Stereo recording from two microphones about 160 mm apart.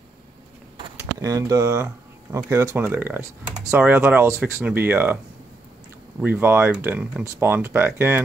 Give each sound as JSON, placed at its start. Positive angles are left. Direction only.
{"t": 0.9, "sound": "speech", "side_deg": -20}
{"t": 6.2, "sound": "speech", "side_deg": -10}